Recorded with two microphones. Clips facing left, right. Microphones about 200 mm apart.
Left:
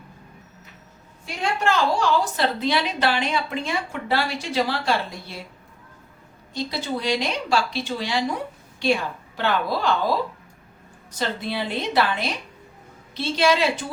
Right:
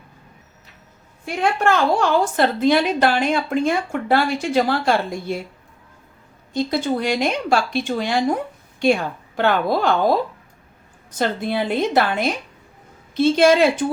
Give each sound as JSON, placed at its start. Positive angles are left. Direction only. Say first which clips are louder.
{"t": 1.2, "sound": "a woman's voice", "louder": "right 5 dB", "side_deg": -55}
{"t": 6.5, "sound": "a woman's voice", "louder": "right 7 dB", "side_deg": -50}